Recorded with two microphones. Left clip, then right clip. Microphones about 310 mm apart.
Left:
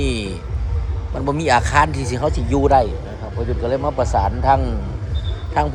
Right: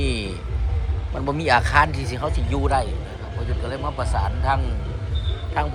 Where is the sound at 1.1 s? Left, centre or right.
Centre.